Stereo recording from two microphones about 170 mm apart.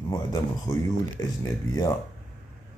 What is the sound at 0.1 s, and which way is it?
Speech, 25° left (ahead or behind).